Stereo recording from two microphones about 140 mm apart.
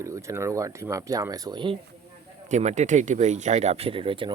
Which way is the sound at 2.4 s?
55° right (ahead or behind).